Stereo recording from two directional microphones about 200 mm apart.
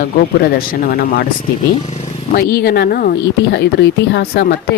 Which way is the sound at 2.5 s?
50° left (ahead or behind).